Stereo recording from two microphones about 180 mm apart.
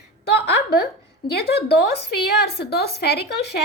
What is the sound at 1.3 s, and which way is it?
A woman's voice, 65° left (ahead or behind).